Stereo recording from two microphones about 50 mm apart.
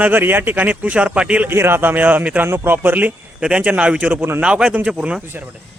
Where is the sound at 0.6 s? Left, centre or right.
Right.